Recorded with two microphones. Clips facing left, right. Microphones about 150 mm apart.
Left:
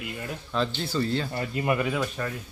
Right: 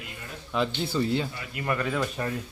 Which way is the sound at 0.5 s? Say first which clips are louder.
Right 1 dB; 15° right (ahead or behind).